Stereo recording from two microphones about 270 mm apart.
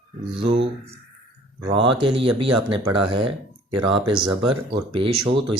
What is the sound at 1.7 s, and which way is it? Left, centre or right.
Speech, centre.